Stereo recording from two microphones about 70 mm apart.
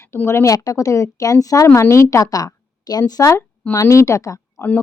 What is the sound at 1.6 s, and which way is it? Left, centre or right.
A woman's voice, left.